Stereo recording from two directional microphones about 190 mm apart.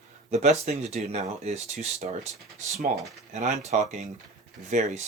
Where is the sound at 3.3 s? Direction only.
35° right (ahead or behind).